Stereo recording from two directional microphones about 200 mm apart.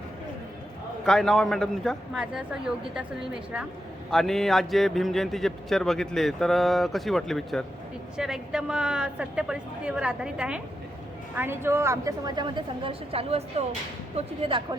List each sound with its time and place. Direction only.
1.0 s a man's voice: 5° left (ahead or behind)
4.1 s a man's voice: centre (ahead or behind); by 14.8 s 25° right (ahead or behind)